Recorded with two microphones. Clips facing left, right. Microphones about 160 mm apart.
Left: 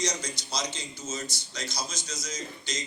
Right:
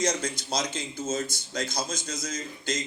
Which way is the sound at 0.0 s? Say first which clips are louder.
Right 5 dB; 55° right (ahead or behind).